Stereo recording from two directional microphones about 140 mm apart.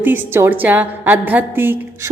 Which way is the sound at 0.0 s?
15° right (ahead or behind).